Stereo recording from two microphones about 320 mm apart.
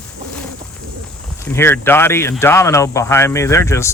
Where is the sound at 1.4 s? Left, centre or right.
Centre.